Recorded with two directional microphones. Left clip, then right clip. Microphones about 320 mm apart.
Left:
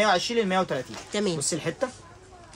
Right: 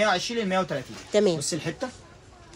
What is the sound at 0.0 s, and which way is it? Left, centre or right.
Speech, centre.